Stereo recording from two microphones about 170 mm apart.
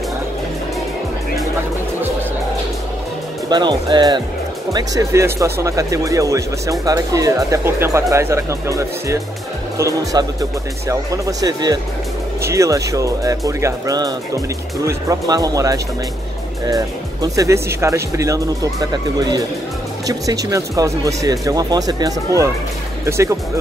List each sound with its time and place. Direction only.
3.4 s speech: 25° right (ahead or behind)